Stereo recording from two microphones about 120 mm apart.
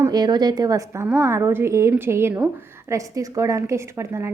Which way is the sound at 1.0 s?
15° right (ahead or behind).